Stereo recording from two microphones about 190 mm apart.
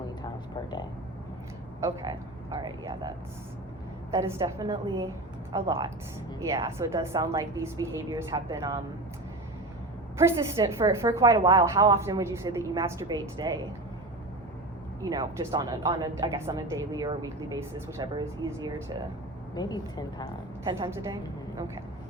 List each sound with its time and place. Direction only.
1.8 s speech: 20° right (ahead or behind)
4.1 s a woman's voice: 15° right (ahead or behind)
10.2 s a woman's voice: 15° right (ahead or behind)
15.0 s speech: 20° right (ahead or behind)
19.5 s a woman's voice: 20° left (ahead or behind)
20.7 s speech: 25° right (ahead or behind)